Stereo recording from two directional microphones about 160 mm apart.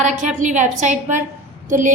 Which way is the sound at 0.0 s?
50° right (ahead or behind).